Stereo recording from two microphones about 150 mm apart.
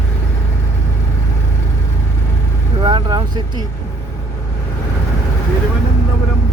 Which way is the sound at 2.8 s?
30° right (ahead or behind).